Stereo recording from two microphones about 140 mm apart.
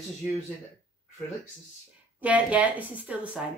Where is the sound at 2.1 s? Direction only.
10° right (ahead or behind).